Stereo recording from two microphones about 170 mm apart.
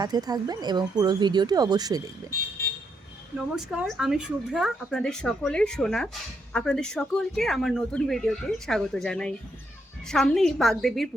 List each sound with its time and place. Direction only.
0.0 s speech: 20° right (ahead or behind)
3.3 s speech: 5° right (ahead or behind)